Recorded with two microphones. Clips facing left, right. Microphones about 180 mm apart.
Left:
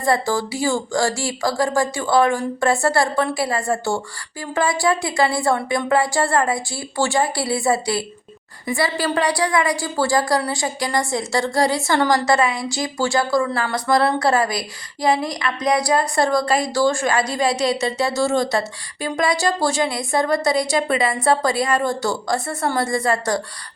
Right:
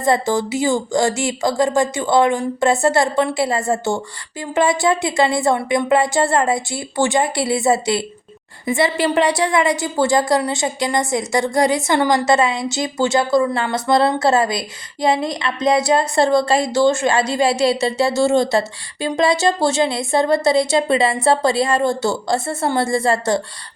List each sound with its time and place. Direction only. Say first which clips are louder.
0.0 s a woman's voice: right 3 dB; 20° right (ahead or behind)